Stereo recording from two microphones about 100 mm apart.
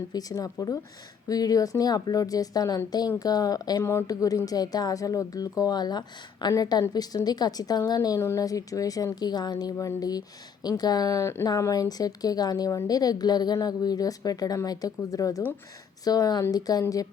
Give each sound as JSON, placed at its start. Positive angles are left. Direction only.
{"t": 0.1, "sound": "a woman's voice", "side_deg": 40}
{"t": 3.8, "sound": "speech", "side_deg": 25}
{"t": 4.1, "sound": "a woman's voice", "side_deg": 35}